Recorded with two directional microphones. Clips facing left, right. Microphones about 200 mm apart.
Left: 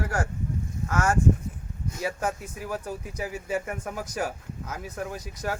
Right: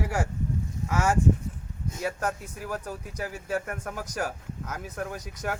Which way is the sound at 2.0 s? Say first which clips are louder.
Left 1 dB; 10° left (ahead or behind).